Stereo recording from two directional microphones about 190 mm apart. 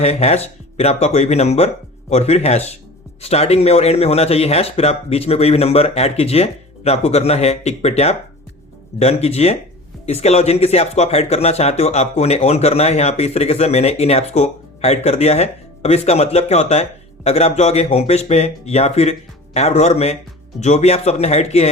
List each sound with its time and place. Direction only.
0.0 s speech: 35° left (ahead or behind)